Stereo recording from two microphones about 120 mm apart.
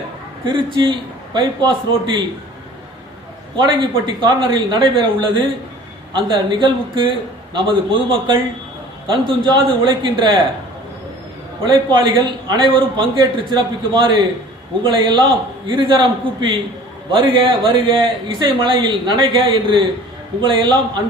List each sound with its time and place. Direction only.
0.4 s a man's voice: 40° right (ahead or behind)
3.6 s a man's voice: 40° right (ahead or behind)
11.6 s a man's voice: 40° right (ahead or behind)